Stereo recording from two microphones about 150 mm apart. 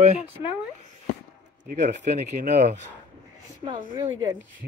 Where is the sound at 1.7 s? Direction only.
55° right (ahead or behind).